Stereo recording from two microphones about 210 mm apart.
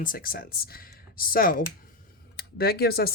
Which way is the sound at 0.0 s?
45° left (ahead or behind).